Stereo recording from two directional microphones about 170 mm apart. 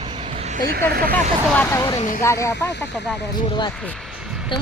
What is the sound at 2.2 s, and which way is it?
Speech, 15° left (ahead or behind).